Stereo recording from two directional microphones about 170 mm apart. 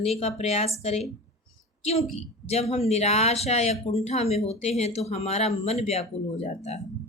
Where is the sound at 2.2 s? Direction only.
40° left (ahead or behind).